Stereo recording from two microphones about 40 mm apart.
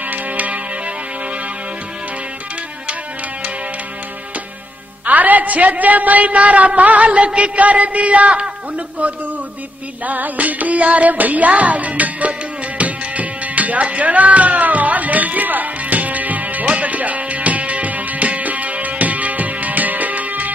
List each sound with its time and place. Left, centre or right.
0.1 s music: right
5.0 s a man's voice: right
10.0 s music: right